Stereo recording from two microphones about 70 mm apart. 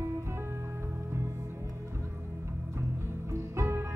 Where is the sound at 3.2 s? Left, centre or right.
Right.